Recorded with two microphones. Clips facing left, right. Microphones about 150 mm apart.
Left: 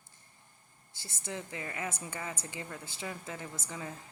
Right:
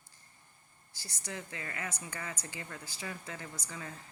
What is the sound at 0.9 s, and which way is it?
A woman's voice, 25° left (ahead or behind).